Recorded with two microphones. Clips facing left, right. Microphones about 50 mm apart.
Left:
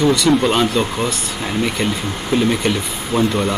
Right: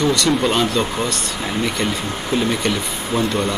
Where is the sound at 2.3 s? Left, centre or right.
Centre.